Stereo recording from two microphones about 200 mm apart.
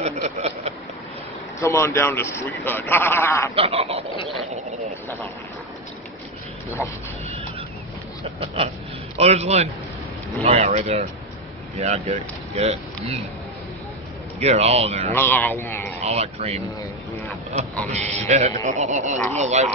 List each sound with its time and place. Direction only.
0.0 s a sound: 35° right (ahead or behind)
1.6 s speech: 15° left (ahead or behind)
3.5 s speech: 30° right (ahead or behind)
8.4 s speech: 30° right (ahead or behind)
14.4 s speech: 30° right (ahead or behind)
15.1 s speech: 10° left (ahead or behind)
16.0 s speech: 35° right (ahead or behind)
17.9 s speech: 35° right (ahead or behind)